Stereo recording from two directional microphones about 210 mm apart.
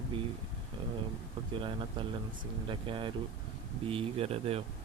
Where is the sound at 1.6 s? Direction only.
25° right (ahead or behind).